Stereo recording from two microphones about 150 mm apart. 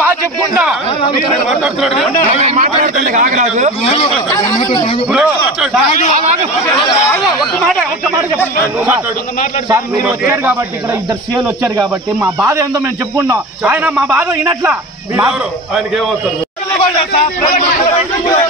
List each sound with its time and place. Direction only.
1.6 s a man's voice: centre (ahead or behind)
2.3 s speech: 45° right (ahead or behind)
5.1 s a man's voice: 5° right (ahead or behind)
7.5 s a man's voice: 5° left (ahead or behind)
10.0 s speech: 10° right (ahead or behind)
13.7 s speech: 5° right (ahead or behind)